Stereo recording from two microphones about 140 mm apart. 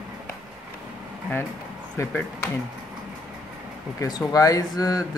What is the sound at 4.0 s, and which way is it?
Speech, 25° left (ahead or behind).